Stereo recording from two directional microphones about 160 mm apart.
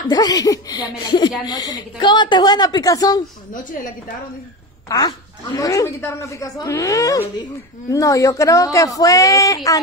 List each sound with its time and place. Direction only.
0.1 s speech: 25° left (ahead or behind)
3.5 s a woman's voice: 55° left (ahead or behind)
4.8 s speech: 25° left (ahead or behind)